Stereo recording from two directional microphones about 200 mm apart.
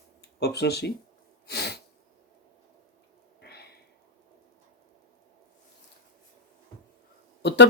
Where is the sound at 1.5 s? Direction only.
55° left (ahead or behind).